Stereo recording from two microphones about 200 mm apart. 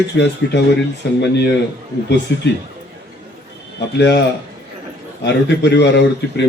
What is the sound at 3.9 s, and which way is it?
Speech, 55° left (ahead or behind).